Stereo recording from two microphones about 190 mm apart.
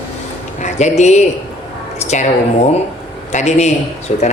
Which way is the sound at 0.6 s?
35° left (ahead or behind).